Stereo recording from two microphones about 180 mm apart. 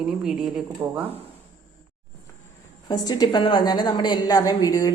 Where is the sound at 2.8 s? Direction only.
20° left (ahead or behind).